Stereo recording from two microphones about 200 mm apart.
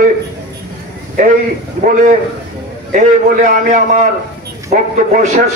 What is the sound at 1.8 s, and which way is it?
Speech, 40° right (ahead or behind).